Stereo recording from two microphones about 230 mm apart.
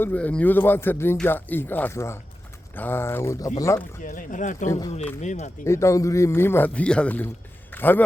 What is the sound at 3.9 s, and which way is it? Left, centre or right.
Speech, left.